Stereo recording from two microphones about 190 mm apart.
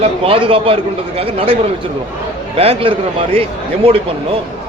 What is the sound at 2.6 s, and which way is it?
A man's voice, 30° right (ahead or behind).